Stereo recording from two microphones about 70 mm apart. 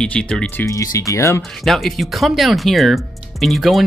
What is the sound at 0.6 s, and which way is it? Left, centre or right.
Speech, left.